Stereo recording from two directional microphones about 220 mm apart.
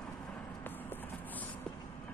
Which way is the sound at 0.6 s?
10° left (ahead or behind).